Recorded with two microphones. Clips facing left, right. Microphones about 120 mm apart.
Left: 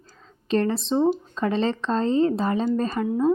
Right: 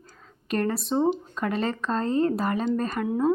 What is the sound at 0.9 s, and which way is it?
Speech, 10° right (ahead or behind).